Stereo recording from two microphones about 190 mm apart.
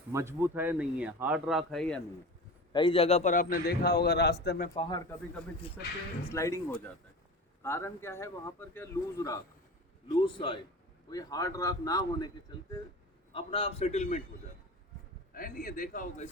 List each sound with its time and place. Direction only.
0.1 s speech: 15° right (ahead or behind); by 2.0 s 5° left (ahead or behind)
2.7 s a man's voice: 25° left (ahead or behind); by 4.7 s 55° left (ahead or behind)
4.8 s a man's voice: 20° left (ahead or behind)
6.3 s a man's voice: 15° left (ahead or behind)
13.3 s a man's voice: 30° left (ahead or behind)
15.3 s a man's voice: 50° left (ahead or behind)